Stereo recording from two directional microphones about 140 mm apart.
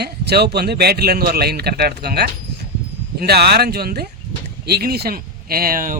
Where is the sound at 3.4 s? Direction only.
90° right.